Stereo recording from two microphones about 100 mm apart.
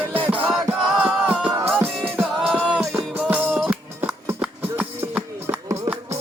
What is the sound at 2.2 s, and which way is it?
Music, centre (ahead or behind).